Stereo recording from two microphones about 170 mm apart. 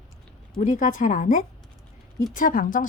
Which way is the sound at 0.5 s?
50° left (ahead or behind).